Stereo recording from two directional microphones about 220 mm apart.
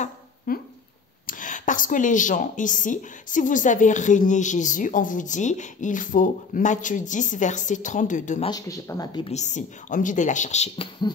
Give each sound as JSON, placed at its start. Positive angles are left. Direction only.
{"t": 0.5, "sound": "speech", "side_deg": 40}
{"t": 8.5, "sound": "speech", "side_deg": 15}
{"t": 9.3, "sound": "speech", "side_deg": 30}